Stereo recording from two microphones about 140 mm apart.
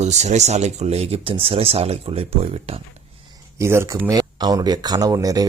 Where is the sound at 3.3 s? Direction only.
20° right (ahead or behind).